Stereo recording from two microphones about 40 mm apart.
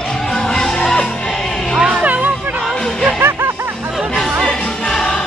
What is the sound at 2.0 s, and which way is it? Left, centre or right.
Music, right.